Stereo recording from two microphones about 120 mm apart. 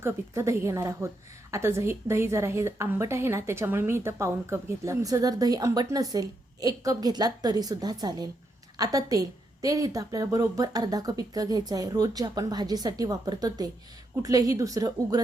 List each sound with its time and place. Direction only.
0.0 s a woman's voice: 25° right (ahead or behind)